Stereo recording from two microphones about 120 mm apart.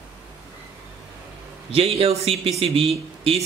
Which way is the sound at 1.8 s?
55° right (ahead or behind).